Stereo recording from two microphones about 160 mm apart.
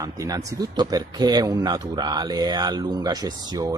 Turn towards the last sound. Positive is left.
turn(degrees=-25)  # may be behind; listen again after turning